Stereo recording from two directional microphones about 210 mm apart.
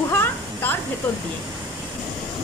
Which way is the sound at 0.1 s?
10° left (ahead or behind).